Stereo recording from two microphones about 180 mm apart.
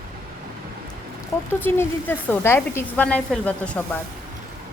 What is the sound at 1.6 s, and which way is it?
A woman's voice, 10° left (ahead or behind).